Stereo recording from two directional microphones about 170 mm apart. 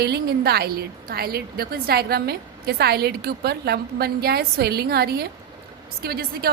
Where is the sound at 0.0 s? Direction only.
70° right (ahead or behind).